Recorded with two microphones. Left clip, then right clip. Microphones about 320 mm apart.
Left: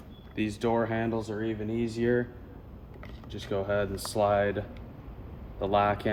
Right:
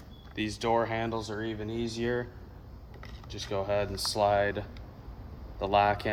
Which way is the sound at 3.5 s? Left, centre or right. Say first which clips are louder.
Left 1 dB; right.